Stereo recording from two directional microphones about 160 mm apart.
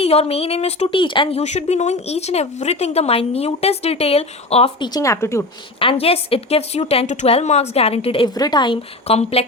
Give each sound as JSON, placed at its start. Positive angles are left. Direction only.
{"t": 0.0, "sound": "a woman's voice", "side_deg": 40}
{"t": 1.4, "sound": "a woman's voice", "side_deg": 45}
{"t": 4.9, "sound": "speech", "side_deg": 20}
{"t": 5.8, "sound": "a woman's voice", "side_deg": 35}